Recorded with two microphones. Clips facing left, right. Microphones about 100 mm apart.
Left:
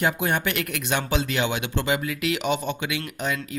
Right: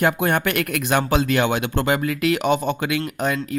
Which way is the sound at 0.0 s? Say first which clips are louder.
Right 4 dB; 55° right (ahead or behind).